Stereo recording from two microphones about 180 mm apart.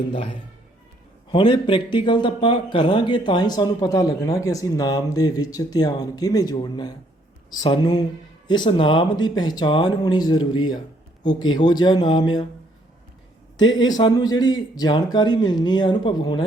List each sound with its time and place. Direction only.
1.3 s speech: 25° left (ahead or behind)
13.6 s speech: 25° left (ahead or behind)